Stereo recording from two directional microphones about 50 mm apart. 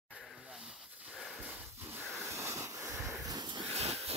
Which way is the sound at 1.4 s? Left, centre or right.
Right.